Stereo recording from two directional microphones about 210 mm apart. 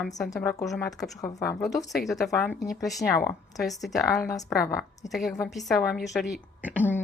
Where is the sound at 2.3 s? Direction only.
15° left (ahead or behind).